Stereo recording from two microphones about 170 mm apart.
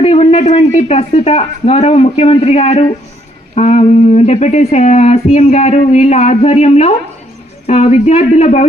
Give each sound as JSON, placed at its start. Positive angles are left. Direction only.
{"t": 0.0, "sound": "speech", "side_deg": 35}